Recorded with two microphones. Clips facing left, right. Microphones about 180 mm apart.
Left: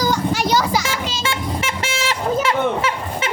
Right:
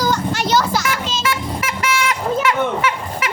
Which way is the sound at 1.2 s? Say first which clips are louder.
Right 1 dB; 25° left (ahead or behind).